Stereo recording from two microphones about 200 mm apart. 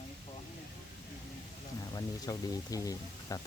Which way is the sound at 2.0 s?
20° left (ahead or behind).